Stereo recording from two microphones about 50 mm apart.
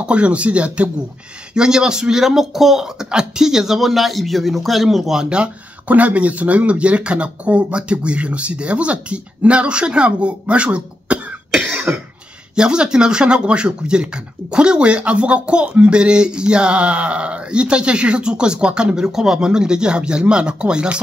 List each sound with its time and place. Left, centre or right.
0.0 s speech: right
1.5 s speech: centre
5.9 s speech: right
11.9 s cough: right
12.5 s speech: centre